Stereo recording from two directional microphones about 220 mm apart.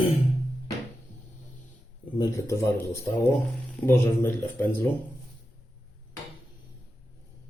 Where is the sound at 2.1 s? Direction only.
15° left (ahead or behind).